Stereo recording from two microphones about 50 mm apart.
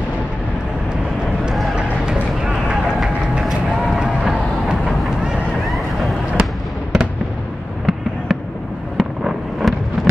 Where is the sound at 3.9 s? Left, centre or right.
Centre.